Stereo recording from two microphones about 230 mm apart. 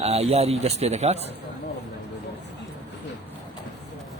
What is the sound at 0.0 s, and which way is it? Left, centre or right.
Speech, right.